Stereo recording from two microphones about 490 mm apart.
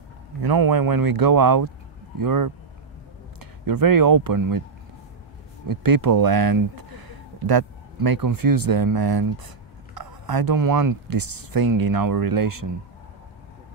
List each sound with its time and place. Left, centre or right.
0.4 s speech: right
5.7 s speech: right